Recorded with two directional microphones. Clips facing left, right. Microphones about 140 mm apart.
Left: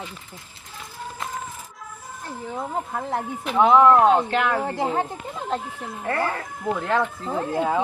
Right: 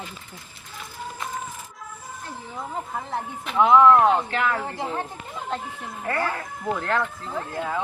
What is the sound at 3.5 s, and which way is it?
Speech, 25° left (ahead or behind).